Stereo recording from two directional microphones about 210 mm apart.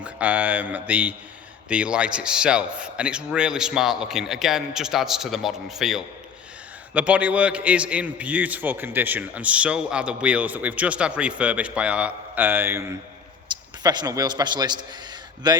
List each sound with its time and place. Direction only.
0.0 s a man's voice: 5° right (ahead or behind)